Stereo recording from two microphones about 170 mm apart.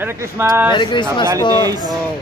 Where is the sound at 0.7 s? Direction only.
25° left (ahead or behind).